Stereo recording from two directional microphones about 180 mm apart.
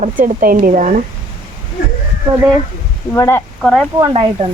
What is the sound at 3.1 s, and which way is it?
Speech, 15° left (ahead or behind).